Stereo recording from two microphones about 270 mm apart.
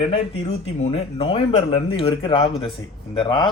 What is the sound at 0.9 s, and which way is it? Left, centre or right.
Speech, centre.